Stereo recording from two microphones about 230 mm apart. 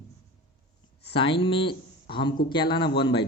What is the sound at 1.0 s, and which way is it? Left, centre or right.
Speech, left.